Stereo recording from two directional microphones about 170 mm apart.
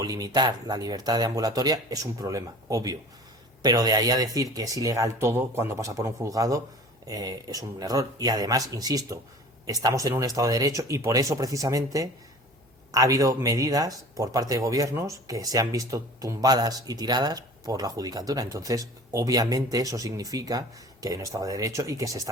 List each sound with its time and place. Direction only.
0.0 s speech: 20° right (ahead or behind)